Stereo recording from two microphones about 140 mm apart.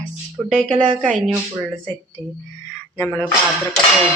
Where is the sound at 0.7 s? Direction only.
35° right (ahead or behind).